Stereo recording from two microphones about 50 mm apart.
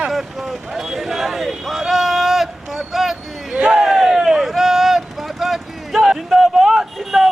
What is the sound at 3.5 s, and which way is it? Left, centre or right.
Crowd, centre.